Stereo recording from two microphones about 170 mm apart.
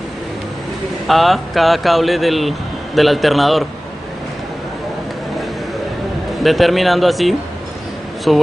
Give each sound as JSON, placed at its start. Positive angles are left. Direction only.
{"t": 1.0, "sound": "speech", "side_deg": 0}
{"t": 6.4, "sound": "speech", "side_deg": 0}